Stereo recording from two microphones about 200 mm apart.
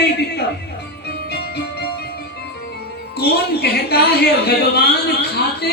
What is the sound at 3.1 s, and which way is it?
Speech, 55° left (ahead or behind).